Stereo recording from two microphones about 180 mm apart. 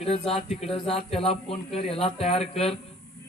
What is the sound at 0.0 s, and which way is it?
Speech, 35° left (ahead or behind).